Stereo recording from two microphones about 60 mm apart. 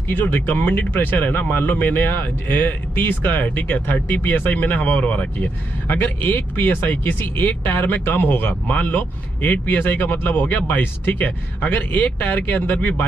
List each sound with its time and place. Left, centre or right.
0.1 s speech: left